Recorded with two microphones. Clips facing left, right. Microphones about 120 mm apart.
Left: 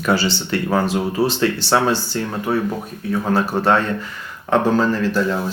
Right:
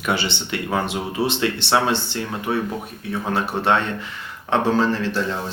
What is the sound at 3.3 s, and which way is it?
Speech, 40° left (ahead or behind).